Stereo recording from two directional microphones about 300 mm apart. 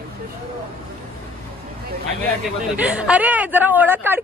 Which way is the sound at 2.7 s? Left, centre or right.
Centre.